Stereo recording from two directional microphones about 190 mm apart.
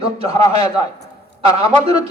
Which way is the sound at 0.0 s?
30° right (ahead or behind).